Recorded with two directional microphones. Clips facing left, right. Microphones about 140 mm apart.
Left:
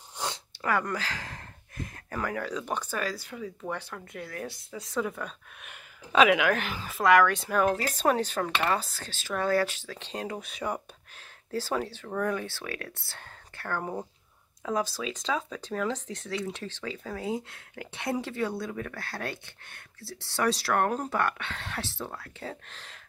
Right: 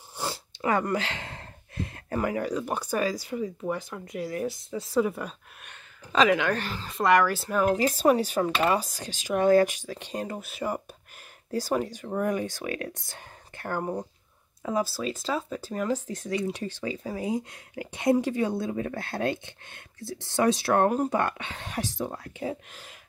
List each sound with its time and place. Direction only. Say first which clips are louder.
0.2 s a sound: right 2 dB; 5° right (ahead or behind)
0.9 s a sound: right 5 dB; 25° right (ahead or behind)
2.1 s speech: right 5 dB; 15° right (ahead or behind)
4.4 s speech: right 7 dB; centre (ahead or behind)
5.7 s speech: left 2 dB; 5° left (ahead or behind)
7.0 s speech: even; centre (ahead or behind); by 13.9 s 15° right (ahead or behind)
14.6 s speech: right 2 dB; 5° right (ahead or behind)